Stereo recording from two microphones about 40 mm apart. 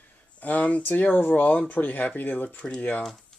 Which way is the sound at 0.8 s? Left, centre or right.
Left.